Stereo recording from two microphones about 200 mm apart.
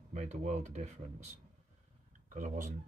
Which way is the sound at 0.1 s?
35° right (ahead or behind).